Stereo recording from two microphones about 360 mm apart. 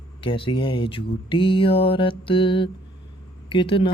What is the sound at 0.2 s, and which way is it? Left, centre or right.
A woman's voice, centre.